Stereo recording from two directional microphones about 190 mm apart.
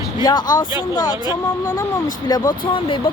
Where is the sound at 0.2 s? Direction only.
20° left (ahead or behind).